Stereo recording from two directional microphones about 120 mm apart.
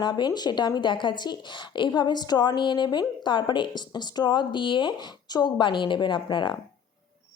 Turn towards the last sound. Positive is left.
turn(degrees=40)  # may be behind; listen again after turning